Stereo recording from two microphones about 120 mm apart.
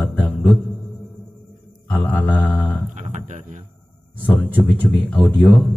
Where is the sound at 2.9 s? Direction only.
85° right.